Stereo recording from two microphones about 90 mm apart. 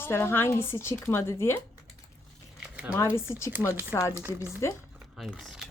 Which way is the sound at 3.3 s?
30° left (ahead or behind).